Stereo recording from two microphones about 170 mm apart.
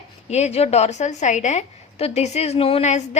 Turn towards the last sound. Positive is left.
turn(degrees=40)  # may be behind; listen again after turning